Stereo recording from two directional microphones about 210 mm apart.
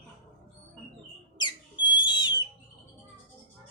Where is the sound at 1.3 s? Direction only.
20° left (ahead or behind).